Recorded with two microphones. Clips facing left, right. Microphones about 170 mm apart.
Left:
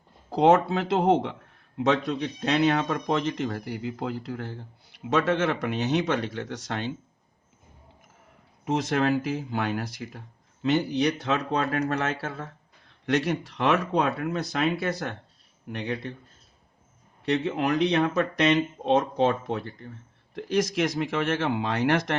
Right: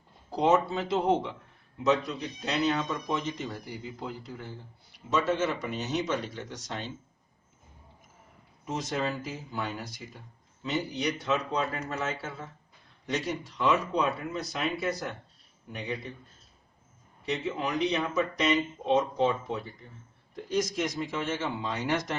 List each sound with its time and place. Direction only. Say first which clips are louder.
0.3 s speech: left 5 dB; 60° left (ahead or behind)
8.6 s speech: left 7 dB; 70° left (ahead or behind)
14.5 s speech: left 3 dB; 80° left
17.2 s speech: left 6 dB; 70° left (ahead or behind)